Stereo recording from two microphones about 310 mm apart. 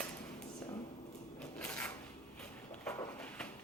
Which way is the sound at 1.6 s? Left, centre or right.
Centre.